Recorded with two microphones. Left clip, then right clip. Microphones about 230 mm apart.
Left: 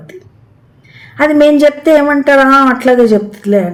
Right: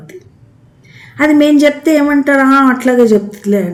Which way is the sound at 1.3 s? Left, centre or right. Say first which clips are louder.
Left 2 dB; centre.